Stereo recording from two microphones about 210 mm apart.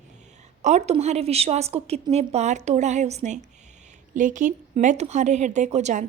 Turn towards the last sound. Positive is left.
turn(degrees=-35)  # may be behind; listen again after turning